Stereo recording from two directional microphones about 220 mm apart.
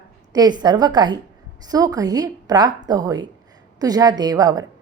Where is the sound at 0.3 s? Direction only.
20° right (ahead or behind).